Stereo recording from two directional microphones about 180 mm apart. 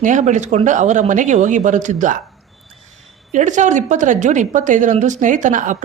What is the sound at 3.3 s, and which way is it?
A woman's voice, 45° right (ahead or behind).